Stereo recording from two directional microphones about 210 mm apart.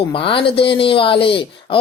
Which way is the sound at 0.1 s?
25° left (ahead or behind).